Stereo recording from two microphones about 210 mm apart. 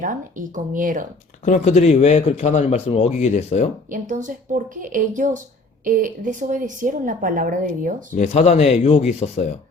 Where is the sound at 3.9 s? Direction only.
35° right (ahead or behind).